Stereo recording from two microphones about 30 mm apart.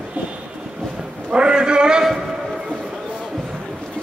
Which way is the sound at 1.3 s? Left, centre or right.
Right.